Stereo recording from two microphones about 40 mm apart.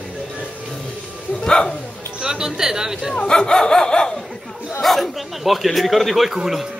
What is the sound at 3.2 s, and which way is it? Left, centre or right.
Dog, centre.